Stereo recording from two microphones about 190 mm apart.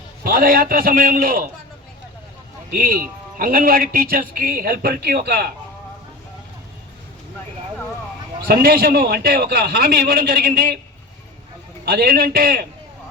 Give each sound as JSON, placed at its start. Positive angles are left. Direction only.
{"t": 0.3, "sound": "speech", "side_deg": -50}
{"t": 2.6, "sound": "speech", "side_deg": -50}
{"t": 8.4, "sound": "speech", "side_deg": -50}
{"t": 11.9, "sound": "speech", "side_deg": -50}